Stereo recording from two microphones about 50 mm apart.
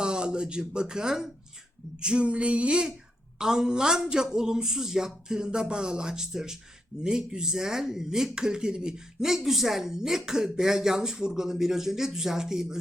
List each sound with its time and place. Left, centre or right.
0.0 s speech: centre
2.0 s female singing: centre
3.3 s speech: centre